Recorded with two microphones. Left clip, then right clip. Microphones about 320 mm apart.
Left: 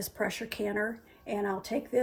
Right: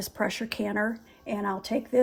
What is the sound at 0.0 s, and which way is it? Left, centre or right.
A woman's voice, right.